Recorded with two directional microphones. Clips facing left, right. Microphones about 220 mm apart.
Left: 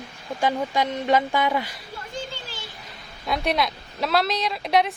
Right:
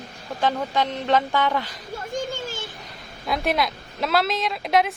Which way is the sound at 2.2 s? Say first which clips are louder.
Right 6 dB; 45° right (ahead or behind).